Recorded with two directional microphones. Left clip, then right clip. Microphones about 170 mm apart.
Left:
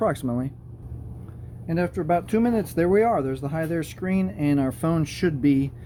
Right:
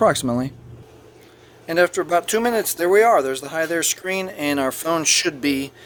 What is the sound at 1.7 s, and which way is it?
Speech, 35° right (ahead or behind).